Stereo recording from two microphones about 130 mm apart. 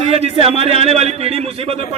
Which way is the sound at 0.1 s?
50° right (ahead or behind).